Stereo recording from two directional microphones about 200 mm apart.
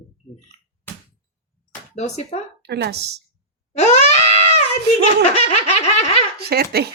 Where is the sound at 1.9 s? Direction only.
35° left (ahead or behind).